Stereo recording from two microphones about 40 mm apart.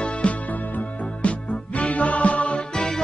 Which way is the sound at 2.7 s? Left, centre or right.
Centre.